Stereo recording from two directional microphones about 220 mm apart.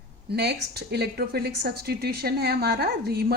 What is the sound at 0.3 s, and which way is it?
Speech, 50° right (ahead or behind).